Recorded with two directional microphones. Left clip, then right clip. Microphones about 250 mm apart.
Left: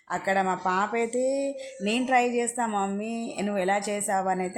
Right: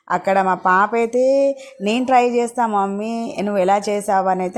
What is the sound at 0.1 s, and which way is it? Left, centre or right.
Speech, right.